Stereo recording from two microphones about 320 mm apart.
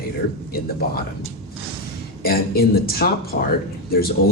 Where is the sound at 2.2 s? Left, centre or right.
Left.